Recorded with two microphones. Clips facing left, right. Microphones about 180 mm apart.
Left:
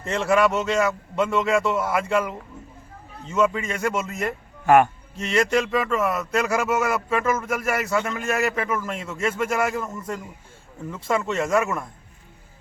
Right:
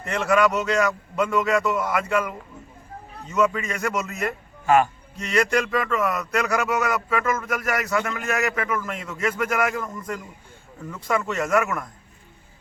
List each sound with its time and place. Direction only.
0.0 s speech: 25° left (ahead or behind)
4.6 s a man's voice: 60° left (ahead or behind)
5.1 s speech: 25° left (ahead or behind)
10.9 s speech: 25° left (ahead or behind)